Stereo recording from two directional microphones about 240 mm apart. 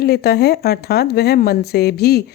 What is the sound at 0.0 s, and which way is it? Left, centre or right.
Speech, left.